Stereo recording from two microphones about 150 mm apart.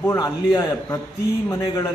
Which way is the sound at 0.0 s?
20° left (ahead or behind).